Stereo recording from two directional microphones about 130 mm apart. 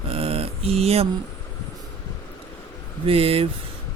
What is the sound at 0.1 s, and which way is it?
Mantra, 45° right (ahead or behind).